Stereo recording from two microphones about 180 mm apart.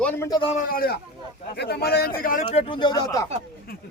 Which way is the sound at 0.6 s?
55° left (ahead or behind).